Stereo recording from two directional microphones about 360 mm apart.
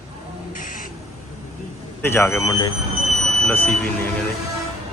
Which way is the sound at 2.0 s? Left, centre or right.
Centre.